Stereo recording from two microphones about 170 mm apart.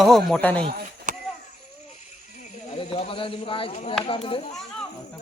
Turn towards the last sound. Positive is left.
turn(degrees=30)  # may be behind; listen again after turning